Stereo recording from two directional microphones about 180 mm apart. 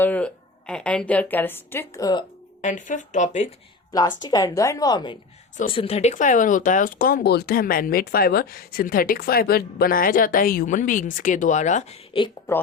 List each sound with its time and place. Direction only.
0.0 s a sound: 10° left (ahead or behind)
0.7 s speech: 5° left (ahead or behind); by 2.2 s 20° left (ahead or behind)
2.6 s speech: 45° left (ahead or behind)
4.2 s a woman's voice: 20° left (ahead or behind)